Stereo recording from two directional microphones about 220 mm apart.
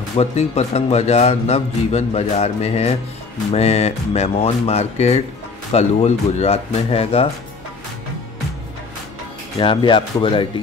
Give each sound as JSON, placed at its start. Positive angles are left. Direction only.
{"t": 0.1, "sound": "speech", "side_deg": 30}
{"t": 9.6, "sound": "speech", "side_deg": 20}